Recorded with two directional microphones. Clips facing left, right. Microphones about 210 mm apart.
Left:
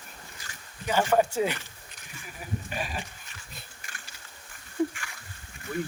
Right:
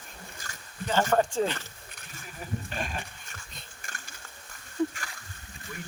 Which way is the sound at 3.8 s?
45° right (ahead or behind).